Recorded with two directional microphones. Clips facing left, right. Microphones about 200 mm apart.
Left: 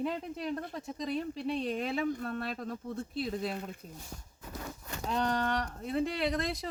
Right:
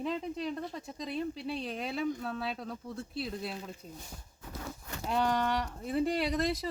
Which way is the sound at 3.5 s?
60° left (ahead or behind).